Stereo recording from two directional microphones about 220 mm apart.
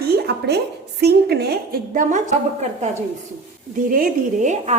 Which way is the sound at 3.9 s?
35° right (ahead or behind).